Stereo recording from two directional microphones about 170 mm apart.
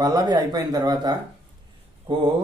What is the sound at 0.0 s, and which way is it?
Mantra, 25° right (ahead or behind).